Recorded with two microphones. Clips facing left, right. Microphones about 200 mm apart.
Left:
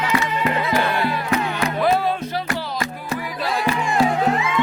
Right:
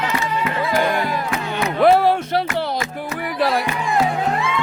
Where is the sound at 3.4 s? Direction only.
60° right (ahead or behind).